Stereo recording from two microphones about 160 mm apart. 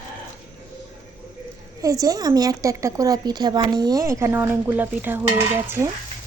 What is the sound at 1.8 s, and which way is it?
A woman's voice, 20° right (ahead or behind).